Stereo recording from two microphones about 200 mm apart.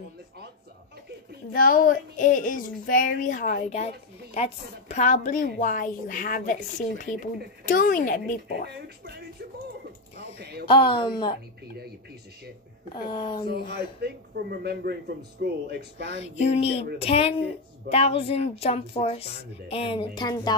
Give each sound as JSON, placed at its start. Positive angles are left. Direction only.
{"t": 1.5, "sound": "speech", "side_deg": 45}
{"t": 7.6, "sound": "speech", "side_deg": 45}
{"t": 8.8, "sound": "a man's voice", "side_deg": -55}
{"t": 10.7, "sound": "speech", "side_deg": 25}
{"t": 12.9, "sound": "speech", "side_deg": 20}
{"t": 13.5, "sound": "a man's voice", "side_deg": -55}
{"t": 16.1, "sound": "speech", "side_deg": 35}